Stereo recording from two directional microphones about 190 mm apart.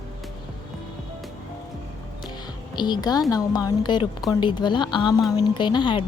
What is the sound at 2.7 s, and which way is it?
Speech, 25° left (ahead or behind).